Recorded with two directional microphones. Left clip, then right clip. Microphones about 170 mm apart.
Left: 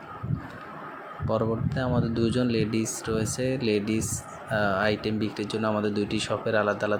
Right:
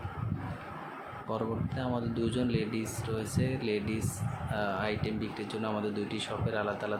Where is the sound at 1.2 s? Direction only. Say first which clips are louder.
Left 8 dB; 30° left (ahead or behind).